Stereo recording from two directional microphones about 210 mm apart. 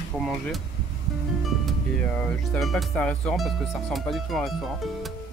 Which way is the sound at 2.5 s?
Centre (ahead or behind).